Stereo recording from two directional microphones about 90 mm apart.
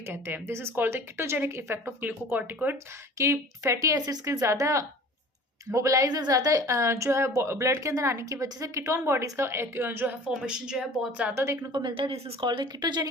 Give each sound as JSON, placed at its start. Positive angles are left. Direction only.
{"t": 0.0, "sound": "a woman's voice", "side_deg": -25}
{"t": 3.2, "sound": "speech", "side_deg": -35}
{"t": 11.3, "sound": "speech", "side_deg": -35}
{"t": 11.7, "sound": "speech", "side_deg": -65}